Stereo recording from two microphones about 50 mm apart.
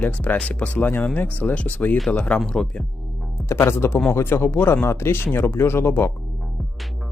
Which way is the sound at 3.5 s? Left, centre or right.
Left.